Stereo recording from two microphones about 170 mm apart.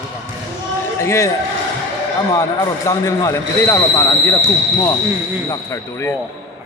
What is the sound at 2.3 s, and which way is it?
Speech, 20° left (ahead or behind).